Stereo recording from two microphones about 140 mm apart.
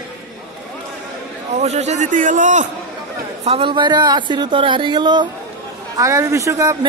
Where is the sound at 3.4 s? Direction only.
40° right (ahead or behind).